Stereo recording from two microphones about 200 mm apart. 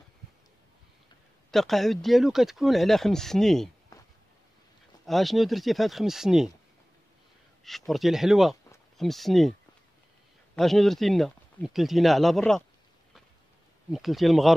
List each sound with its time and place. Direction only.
1.5 s speech: centre (ahead or behind)
5.0 s speech: centre (ahead or behind)
7.6 s speech: centre (ahead or behind)
13.9 s speech: centre (ahead or behind)